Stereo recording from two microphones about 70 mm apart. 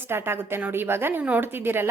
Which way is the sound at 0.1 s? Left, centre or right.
Right.